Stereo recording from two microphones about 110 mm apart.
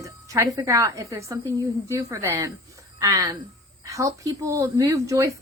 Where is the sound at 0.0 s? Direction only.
30° right (ahead or behind).